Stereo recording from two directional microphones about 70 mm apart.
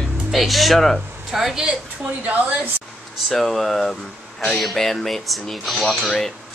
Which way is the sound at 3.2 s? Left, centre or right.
Centre.